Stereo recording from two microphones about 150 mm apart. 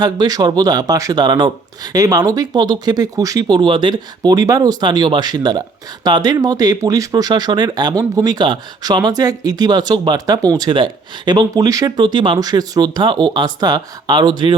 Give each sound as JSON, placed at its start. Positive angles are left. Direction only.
{"t": 0.0, "sound": "speech", "side_deg": -25}